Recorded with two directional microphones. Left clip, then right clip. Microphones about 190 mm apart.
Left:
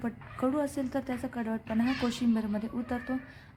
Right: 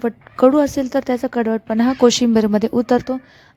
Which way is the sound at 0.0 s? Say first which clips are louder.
Right 18 dB; 45° right (ahead or behind).